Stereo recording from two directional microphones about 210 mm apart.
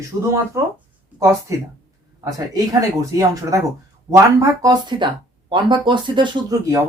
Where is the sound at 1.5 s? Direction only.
15° right (ahead or behind).